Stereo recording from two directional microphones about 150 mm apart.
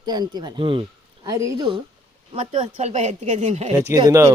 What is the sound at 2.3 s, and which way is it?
Speech, 45° right (ahead or behind).